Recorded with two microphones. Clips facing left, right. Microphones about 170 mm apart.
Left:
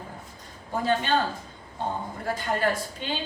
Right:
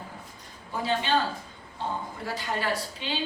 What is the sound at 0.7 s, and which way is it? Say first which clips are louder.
Speech: left 3 dB; 50° left (ahead or behind).